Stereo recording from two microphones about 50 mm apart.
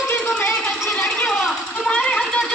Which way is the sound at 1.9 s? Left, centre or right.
Left.